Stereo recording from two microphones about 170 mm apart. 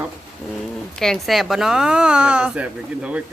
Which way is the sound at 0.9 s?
Centre (ahead or behind).